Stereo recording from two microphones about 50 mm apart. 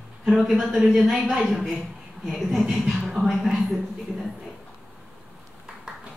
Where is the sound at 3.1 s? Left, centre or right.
Centre.